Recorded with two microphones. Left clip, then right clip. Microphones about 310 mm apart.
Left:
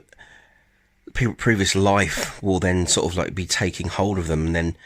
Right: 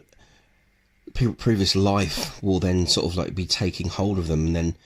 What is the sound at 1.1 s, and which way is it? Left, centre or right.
Speech, left.